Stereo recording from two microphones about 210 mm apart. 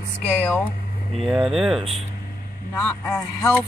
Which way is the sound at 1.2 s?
Centre (ahead or behind).